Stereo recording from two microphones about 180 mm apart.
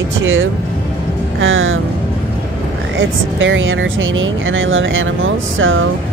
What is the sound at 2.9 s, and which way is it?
Speech, 90° right.